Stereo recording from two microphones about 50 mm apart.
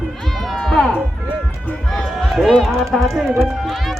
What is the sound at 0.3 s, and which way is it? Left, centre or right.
Music, centre.